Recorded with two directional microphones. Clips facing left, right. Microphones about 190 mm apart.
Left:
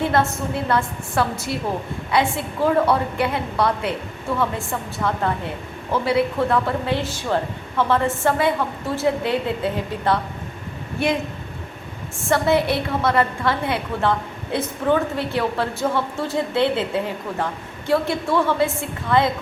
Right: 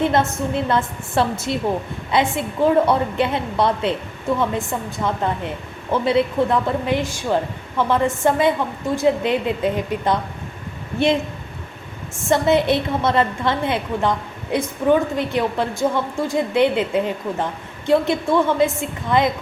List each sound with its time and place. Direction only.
0.0 s a woman's voice: 20° right (ahead or behind)
5.0 s a woman's voice: 20° right (ahead or behind)
12.3 s a woman's voice: 20° right (ahead or behind)